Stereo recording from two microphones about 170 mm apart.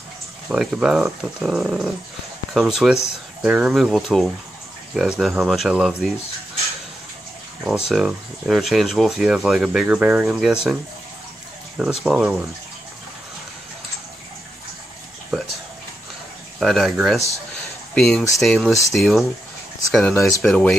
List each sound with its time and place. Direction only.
0.5 s speech: 5° right (ahead or behind)
7.9 s speech: centre (ahead or behind)
12.0 s speech: 5° right (ahead or behind)
16.5 s speech: centre (ahead or behind)
20.2 s speech: 20° left (ahead or behind)
20.4 s speech: 5° left (ahead or behind)